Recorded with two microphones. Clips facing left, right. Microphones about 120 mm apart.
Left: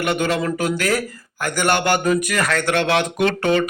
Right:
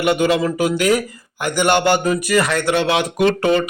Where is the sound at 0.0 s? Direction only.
10° right (ahead or behind).